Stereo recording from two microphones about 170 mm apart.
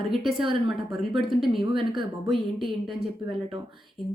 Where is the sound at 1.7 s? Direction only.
30° right (ahead or behind).